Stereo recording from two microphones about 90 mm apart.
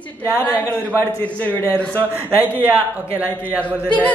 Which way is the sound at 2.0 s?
15° right (ahead or behind).